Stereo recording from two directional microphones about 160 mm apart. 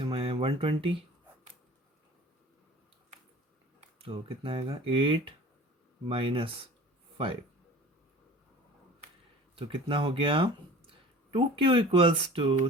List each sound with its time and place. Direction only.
0.0 s a sound: 35° right (ahead or behind)
3.8 s speech: 35° right (ahead or behind)
9.6 s speech: 35° right (ahead or behind)